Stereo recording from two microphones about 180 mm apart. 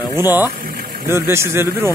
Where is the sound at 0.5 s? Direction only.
55° right (ahead or behind).